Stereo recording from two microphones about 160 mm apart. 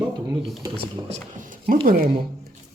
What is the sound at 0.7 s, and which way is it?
Speech, 50° right (ahead or behind).